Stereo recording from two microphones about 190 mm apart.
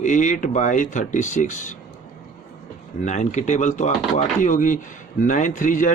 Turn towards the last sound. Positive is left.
turn(degrees=40)  # may be behind; listen again after turning